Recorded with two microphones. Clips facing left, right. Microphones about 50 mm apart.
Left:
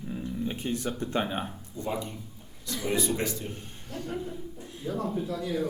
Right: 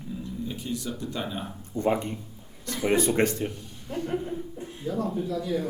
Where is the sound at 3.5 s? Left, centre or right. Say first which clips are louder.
Even; left.